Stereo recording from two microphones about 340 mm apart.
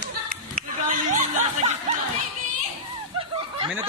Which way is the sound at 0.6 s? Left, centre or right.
Right.